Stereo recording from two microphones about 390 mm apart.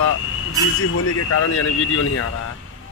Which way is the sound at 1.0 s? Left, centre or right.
Left.